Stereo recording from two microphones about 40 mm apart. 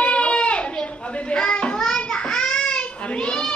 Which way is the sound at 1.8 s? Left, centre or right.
Centre.